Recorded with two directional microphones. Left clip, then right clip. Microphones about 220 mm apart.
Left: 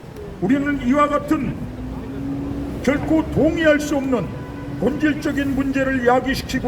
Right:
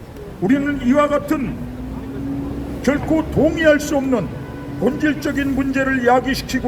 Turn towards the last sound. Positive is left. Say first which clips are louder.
# right 2 dB
turn(degrees=-30)  # may be behind; listen again after turning